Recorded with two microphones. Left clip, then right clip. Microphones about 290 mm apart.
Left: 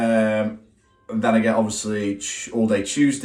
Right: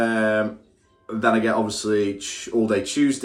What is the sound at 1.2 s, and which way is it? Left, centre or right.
Speech, centre.